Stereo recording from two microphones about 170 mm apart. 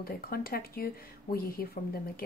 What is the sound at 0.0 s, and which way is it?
Speech, 60° left (ahead or behind).